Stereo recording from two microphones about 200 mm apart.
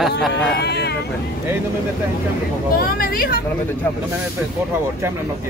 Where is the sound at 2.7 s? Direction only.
45° left (ahead or behind).